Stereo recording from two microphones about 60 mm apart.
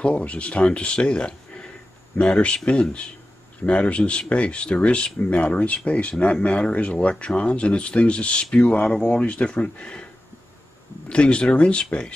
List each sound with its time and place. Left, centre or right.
0.0 s speech: left
11.1 s speech: centre